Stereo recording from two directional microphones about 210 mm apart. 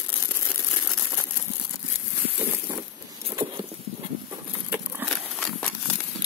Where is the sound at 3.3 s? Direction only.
25° right (ahead or behind).